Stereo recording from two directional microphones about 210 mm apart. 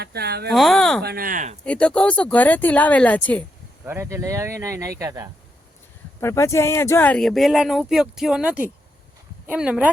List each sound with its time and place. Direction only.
0.0 s speech: 50° right (ahead or behind)
0.5 s speech: centre (ahead or behind)
1.0 s speech: 45° right (ahead or behind)
1.6 s speech: 5° left (ahead or behind)
3.8 s speech: 10° right (ahead or behind)
6.1 s speech: 15° left (ahead or behind); by 9.9 s 5° right (ahead or behind)